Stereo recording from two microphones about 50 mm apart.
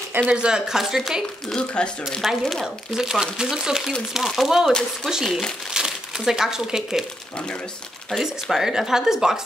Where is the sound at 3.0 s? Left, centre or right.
Centre.